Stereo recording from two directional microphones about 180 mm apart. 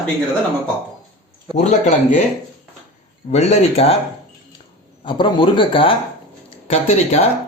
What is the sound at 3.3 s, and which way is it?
Speech, 35° left (ahead or behind).